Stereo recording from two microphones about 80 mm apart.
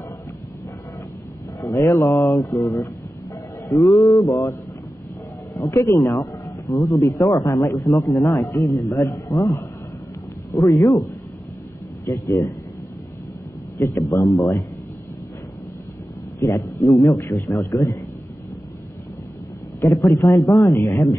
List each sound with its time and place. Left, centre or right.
1.6 s a man's voice: left
5.5 s a man's voice: left
12.1 s a man's voice: left
13.7 s a man's voice: left
16.3 s a man's voice: left
19.8 s a man's voice: left